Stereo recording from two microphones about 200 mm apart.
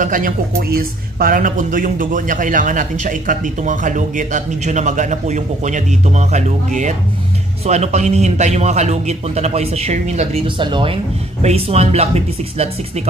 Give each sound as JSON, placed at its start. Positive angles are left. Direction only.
{"t": 0.0, "sound": "speech", "side_deg": -40}